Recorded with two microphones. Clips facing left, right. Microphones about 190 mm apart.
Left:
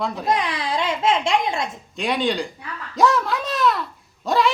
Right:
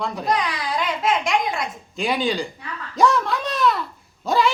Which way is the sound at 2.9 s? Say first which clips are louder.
Even; centre (ahead or behind).